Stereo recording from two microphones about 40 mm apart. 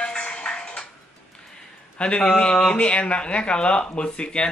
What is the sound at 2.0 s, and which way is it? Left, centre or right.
Speech, left.